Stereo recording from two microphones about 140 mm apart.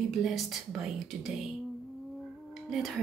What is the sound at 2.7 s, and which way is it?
Speech, centre (ahead or behind).